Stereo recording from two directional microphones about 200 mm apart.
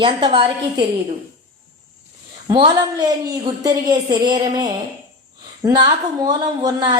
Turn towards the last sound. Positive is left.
turn(degrees=-20)  # may be behind; listen again after turning